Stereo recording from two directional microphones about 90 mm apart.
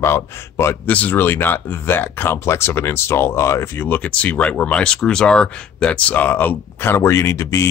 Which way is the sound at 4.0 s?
15° left (ahead or behind).